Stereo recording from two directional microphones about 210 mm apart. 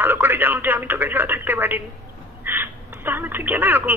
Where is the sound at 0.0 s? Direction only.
10° right (ahead or behind).